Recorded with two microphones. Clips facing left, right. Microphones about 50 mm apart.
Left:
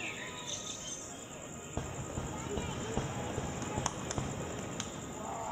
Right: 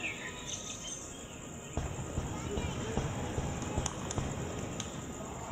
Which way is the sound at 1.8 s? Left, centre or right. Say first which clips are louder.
Right 1 dB; centre.